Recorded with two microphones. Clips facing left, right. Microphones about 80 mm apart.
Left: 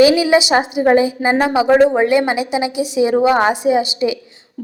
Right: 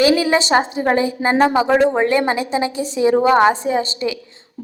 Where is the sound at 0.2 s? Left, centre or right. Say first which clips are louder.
Left 2 dB; centre.